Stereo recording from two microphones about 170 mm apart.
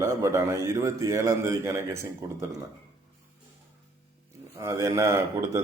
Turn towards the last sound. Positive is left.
turn(degrees=-15)  # may be behind; listen again after turning